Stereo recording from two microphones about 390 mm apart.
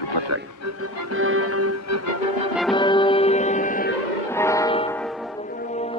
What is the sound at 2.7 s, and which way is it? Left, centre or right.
Music, centre.